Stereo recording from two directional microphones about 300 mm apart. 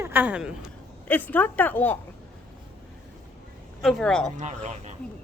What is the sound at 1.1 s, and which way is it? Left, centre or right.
Speech, centre.